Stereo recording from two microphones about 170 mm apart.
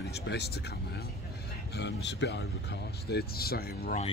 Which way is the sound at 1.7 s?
90° left.